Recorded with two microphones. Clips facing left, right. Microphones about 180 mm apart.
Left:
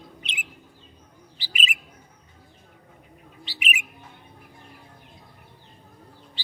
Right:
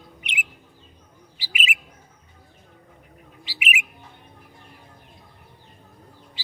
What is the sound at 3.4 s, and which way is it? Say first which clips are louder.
Bird: right 2 dB; 10° right (ahead or behind).